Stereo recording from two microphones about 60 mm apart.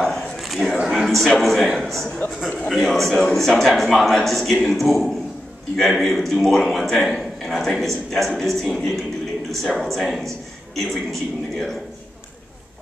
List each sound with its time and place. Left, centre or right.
0.0 s a sound: centre
0.8 s a man's voice: centre
2.0 s a man's voice: left
2.7 s a man's voice: centre